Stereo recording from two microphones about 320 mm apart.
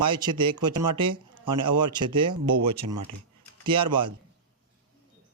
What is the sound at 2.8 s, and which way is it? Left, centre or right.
Speech, right.